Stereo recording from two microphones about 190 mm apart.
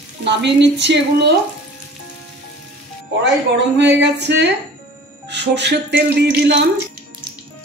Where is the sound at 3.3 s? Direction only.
65° right (ahead or behind).